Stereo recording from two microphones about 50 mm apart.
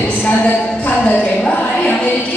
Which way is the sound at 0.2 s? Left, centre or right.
Left.